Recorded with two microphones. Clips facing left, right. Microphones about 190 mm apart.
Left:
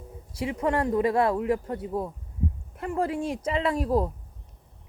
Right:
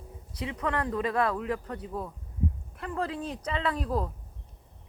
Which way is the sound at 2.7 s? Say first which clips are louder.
Left 7 dB; 25° left (ahead or behind).